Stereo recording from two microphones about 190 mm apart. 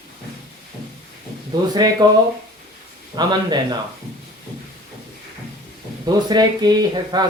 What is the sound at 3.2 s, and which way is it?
Speech, 20° right (ahead or behind).